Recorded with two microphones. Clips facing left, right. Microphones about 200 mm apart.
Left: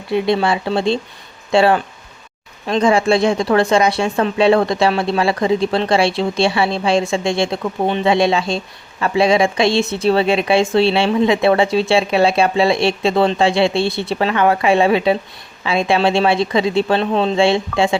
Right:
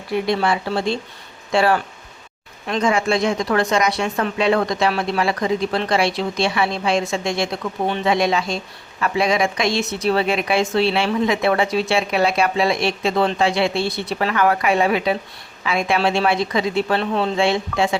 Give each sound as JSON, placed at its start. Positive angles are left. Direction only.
{"t": 0.1, "sound": "speech", "side_deg": 25}